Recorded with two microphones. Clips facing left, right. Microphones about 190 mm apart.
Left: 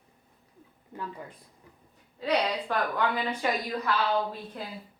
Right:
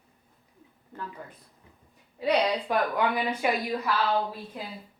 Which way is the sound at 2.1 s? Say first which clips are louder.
Right 3 dB; 15° right (ahead or behind).